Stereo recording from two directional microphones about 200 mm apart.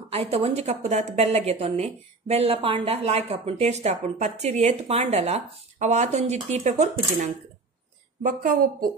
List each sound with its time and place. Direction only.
0.1 s a woman's voice: 30° right (ahead or behind); by 8.9 s 45° right (ahead or behind)